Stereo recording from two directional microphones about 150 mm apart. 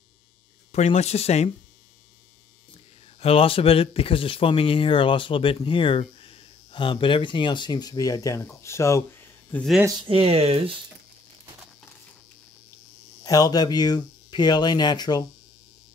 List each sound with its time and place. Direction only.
0.7 s speech: 50° left (ahead or behind)
3.2 s speech: 40° left (ahead or behind); by 9.7 s 10° left (ahead or behind)
9.8 s speech: 35° right (ahead or behind)
13.2 s speech: 25° left (ahead or behind)